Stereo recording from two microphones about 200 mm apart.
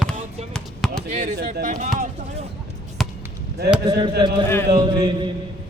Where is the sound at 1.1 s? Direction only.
45° right (ahead or behind).